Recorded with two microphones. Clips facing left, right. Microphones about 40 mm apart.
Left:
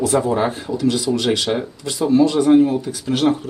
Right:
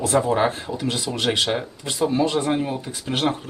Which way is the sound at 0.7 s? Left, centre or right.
Right.